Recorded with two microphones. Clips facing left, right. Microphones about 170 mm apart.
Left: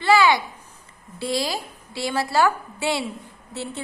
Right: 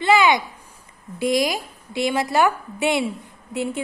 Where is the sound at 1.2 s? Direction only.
15° right (ahead or behind).